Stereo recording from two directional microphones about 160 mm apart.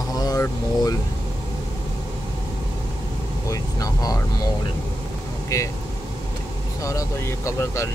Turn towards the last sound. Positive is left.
turn(degrees=15)  # may be behind; listen again after turning